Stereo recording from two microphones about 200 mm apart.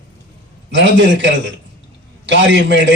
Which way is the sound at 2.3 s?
65° right (ahead or behind).